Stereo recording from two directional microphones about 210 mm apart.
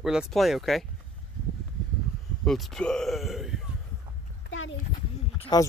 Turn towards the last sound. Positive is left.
turn(degrees=20)  # may be behind; listen again after turning